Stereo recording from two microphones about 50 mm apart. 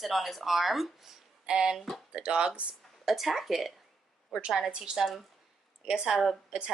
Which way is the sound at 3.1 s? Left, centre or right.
Centre.